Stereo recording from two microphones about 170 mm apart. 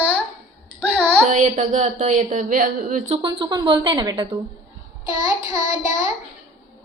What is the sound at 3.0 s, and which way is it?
Speech, 30° right (ahead or behind).